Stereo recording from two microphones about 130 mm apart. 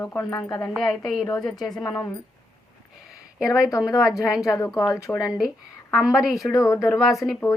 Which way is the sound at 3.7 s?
25° left (ahead or behind).